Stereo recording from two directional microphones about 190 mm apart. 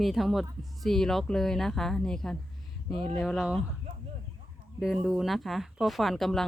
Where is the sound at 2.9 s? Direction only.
30° right (ahead or behind).